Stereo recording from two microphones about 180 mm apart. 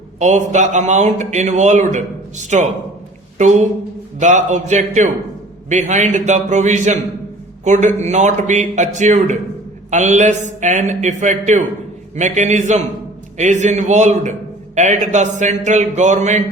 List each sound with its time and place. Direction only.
0.2 s speech: 40° right (ahead or behind)